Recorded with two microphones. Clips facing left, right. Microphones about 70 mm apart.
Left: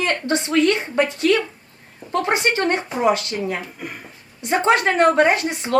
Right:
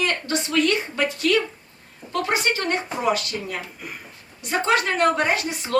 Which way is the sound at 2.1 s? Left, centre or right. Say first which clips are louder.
Left 3 dB; left.